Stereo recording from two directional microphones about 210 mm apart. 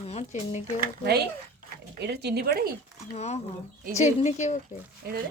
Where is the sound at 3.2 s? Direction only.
30° left (ahead or behind).